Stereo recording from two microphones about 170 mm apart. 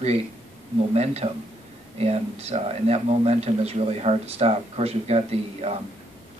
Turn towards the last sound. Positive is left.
turn(degrees=-35)  # may be behind; listen again after turning